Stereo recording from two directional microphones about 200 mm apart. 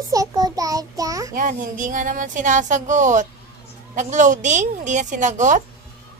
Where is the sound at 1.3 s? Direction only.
40° right (ahead or behind).